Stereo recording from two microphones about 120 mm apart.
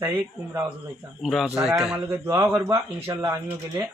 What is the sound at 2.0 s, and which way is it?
Speech, 30° right (ahead or behind).